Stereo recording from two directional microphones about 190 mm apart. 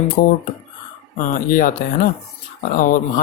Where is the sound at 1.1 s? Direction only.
45° left (ahead or behind).